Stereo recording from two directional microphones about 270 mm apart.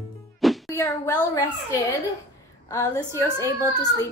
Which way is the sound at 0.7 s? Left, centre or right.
Centre.